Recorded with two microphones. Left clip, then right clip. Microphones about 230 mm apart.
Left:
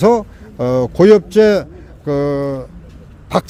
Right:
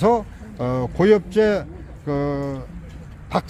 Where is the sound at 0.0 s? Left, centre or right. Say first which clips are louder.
Left 6 dB; left.